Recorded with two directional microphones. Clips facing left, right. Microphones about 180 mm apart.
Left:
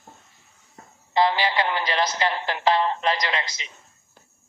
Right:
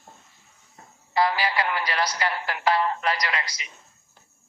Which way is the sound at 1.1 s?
25° left (ahead or behind).